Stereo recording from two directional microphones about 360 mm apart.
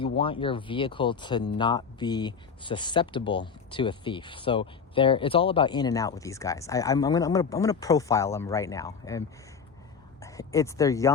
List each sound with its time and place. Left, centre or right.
0.2 s speech: centre